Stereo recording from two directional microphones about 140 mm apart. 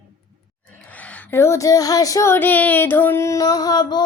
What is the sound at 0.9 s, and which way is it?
Child singing, 10° left (ahead or behind).